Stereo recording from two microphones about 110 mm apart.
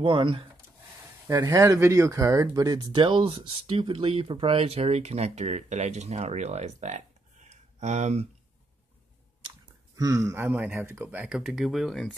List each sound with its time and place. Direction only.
0.0 s speech: 50° right (ahead or behind)
1.4 s speech: 30° right (ahead or behind); by 7.0 s 90° right
7.4 s a sound: 90° right
9.9 s speech: 30° right (ahead or behind); by 12.2 s 5° left (ahead or behind)